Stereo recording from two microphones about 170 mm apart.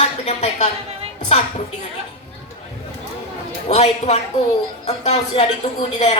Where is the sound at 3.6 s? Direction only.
40° left (ahead or behind).